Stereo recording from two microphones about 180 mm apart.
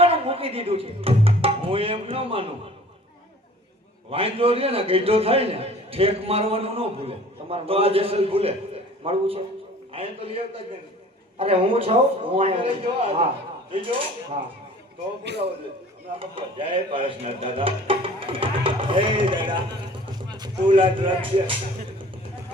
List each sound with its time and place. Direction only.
0.0 s speech: 30° right (ahead or behind)
4.1 s a man's voice: 30° right (ahead or behind)
15.2 s a man's voice: 70° right (ahead or behind)
16.1 s speech: 30° right (ahead or behind)